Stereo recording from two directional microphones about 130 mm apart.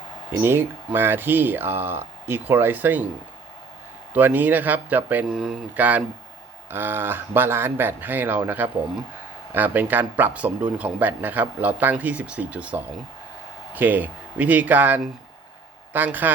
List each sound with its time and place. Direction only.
0.4 s speech: 15° right (ahead or behind)
4.1 s speech: 10° right (ahead or behind)
5.3 s speech: centre (ahead or behind)